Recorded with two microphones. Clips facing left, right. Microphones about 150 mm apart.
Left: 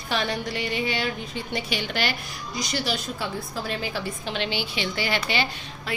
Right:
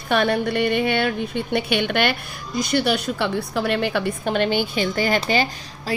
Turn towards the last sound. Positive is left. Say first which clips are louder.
# right 4 dB
turn(degrees=-45)  # may be behind; listen again after turning